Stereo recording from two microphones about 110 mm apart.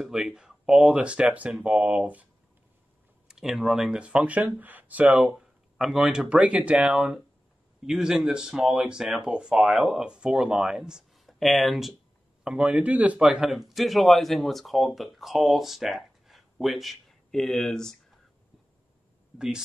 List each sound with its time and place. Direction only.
0.0 s speech: 5° right (ahead or behind)
3.3 s a man's voice: 5° right (ahead or behind)
19.3 s speech: 5° right (ahead or behind)